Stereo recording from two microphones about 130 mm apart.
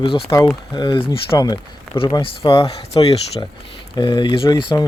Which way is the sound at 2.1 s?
40° left (ahead or behind).